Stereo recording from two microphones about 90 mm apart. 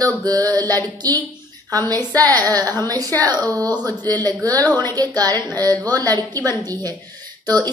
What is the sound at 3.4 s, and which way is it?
Speech, 15° left (ahead or behind).